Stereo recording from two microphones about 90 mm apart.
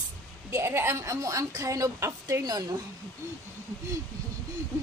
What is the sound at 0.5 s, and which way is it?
A woman's voice, 30° right (ahead or behind).